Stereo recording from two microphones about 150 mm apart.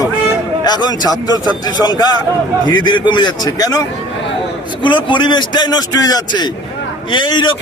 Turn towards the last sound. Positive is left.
turn(degrees=30)  # may be behind; listen again after turning